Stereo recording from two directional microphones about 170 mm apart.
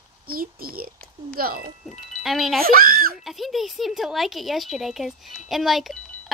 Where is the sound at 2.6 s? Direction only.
60° right (ahead or behind).